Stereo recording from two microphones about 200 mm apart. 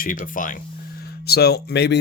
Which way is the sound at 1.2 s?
55° left (ahead or behind).